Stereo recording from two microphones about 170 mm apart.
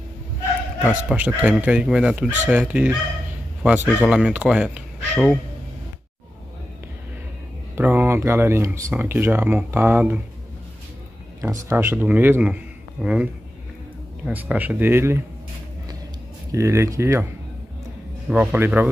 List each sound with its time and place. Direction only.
0.8 s speech: 10° right (ahead or behind)
7.7 s speech: 15° right (ahead or behind)
11.7 s speech: 10° right (ahead or behind)
16.5 s speech: 20° right (ahead or behind)
18.3 s speech: 10° right (ahead or behind)